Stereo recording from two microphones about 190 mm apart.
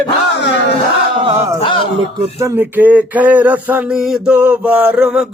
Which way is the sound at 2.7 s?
10° right (ahead or behind).